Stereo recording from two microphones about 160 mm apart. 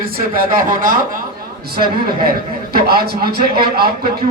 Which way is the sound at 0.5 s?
60° right (ahead or behind).